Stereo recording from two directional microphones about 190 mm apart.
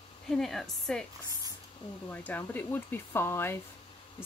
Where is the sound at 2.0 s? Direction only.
10° left (ahead or behind).